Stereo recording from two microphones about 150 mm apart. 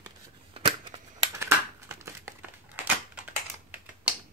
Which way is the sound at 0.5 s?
35° right (ahead or behind).